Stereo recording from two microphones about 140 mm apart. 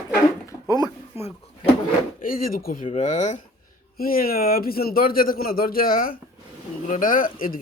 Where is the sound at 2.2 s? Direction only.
85° left.